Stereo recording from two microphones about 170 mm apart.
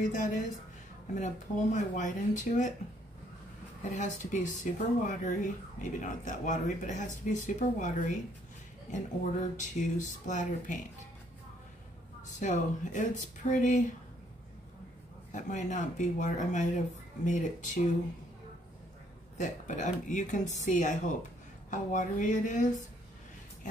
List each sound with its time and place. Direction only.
0.1 s speech: 45° left (ahead or behind)
3.9 s speech: 45° left (ahead or behind)
12.4 s speech: 45° left (ahead or behind)
15.3 s speech: 45° left (ahead or behind)
19.3 s speech: 45° left (ahead or behind)